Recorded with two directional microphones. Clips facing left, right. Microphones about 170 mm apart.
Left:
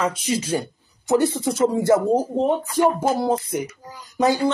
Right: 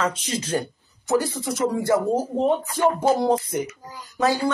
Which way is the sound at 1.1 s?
25° left (ahead or behind).